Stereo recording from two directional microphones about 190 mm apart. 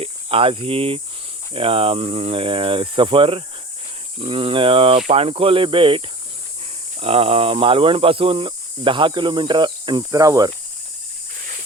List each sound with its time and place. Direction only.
0.0 s speech: 30° right (ahead or behind)
7.0 s speech: 30° right (ahead or behind)